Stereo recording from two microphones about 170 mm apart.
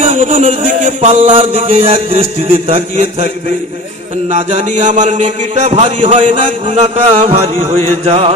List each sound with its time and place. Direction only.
0.0 s music: 40° right (ahead or behind)
4.3 s a man's voice: 45° right (ahead or behind)